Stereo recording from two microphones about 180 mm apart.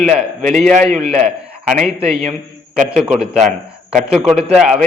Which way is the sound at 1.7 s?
5° right (ahead or behind).